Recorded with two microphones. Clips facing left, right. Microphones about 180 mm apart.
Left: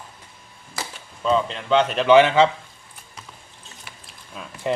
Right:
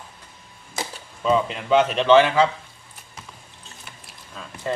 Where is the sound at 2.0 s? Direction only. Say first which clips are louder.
Left 3 dB; 20° left (ahead or behind).